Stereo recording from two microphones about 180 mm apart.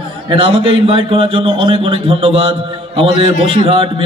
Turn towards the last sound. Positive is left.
turn(degrees=-30)  # may be behind; listen again after turning